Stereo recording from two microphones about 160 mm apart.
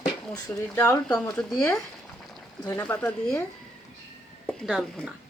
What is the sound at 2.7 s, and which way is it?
A woman's voice, 10° left (ahead or behind).